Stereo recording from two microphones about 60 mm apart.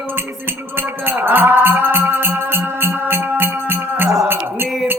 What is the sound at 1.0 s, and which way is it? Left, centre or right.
Music, right.